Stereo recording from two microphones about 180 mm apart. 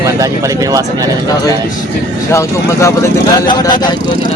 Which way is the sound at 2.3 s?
15° left (ahead or behind).